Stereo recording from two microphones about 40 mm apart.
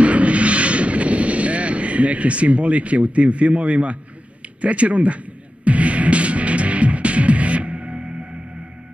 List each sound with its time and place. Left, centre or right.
0.0 s vehicle: right
4.6 s music: right